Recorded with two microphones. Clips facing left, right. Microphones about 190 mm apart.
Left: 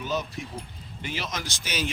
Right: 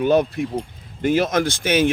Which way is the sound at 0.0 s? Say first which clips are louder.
Right 13 dB; 60° right (ahead or behind).